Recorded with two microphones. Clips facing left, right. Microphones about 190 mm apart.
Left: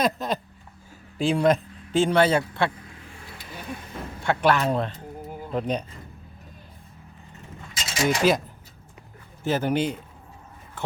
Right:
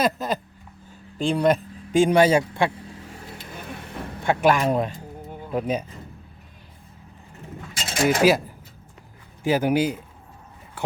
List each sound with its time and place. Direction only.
0.0 s speech: centre (ahead or behind)
1.9 s a man's voice: 15° right (ahead or behind)
4.2 s a man's voice: 15° right (ahead or behind)
7.7 s mechanisms: 55° right (ahead or behind)
8.2 s a man's voice: 10° right (ahead or behind)
10.8 s a sound: 10° right (ahead or behind)